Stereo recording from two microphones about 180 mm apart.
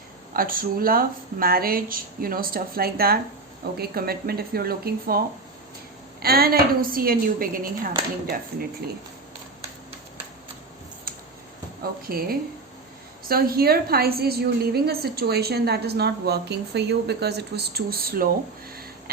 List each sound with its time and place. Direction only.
0.3 s a woman's voice: 50° right (ahead or behind)
6.2 s a woman's voice: 55° right (ahead or behind)
8.8 s a woman's voice: 60° right (ahead or behind)
11.8 s a woman's voice: 55° right (ahead or behind)
18.7 s a sound: 55° right (ahead or behind)